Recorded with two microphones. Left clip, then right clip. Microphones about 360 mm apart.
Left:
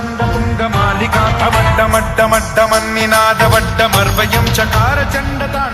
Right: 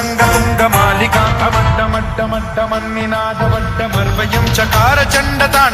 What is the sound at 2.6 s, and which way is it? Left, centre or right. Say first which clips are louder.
Music: left 3 dB; left.